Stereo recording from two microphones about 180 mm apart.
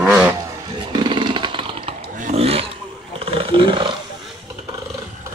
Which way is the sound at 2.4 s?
35° right (ahead or behind).